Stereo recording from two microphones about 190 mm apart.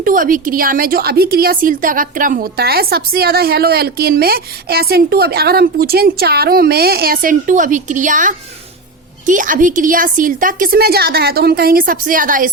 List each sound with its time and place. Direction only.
0.0 s a woman's voice: 45° right (ahead or behind)